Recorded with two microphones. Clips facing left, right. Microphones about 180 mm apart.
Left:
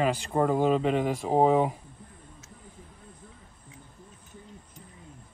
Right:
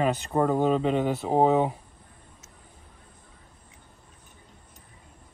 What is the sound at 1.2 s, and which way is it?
Speech, 25° right (ahead or behind).